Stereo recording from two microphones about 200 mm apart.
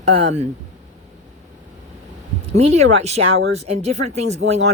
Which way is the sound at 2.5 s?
35° right (ahead or behind).